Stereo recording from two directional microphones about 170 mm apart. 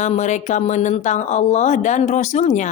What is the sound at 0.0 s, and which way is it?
Speech, 45° left (ahead or behind).